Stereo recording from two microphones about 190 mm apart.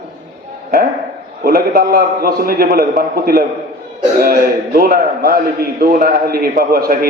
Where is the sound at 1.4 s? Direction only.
55° right (ahead or behind).